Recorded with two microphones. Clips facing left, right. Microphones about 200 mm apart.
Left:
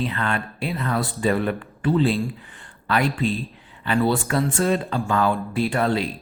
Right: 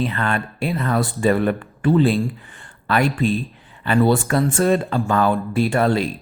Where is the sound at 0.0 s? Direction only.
45° right (ahead or behind).